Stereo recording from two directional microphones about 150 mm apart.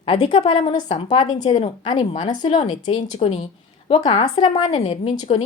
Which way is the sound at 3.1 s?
40° left (ahead or behind).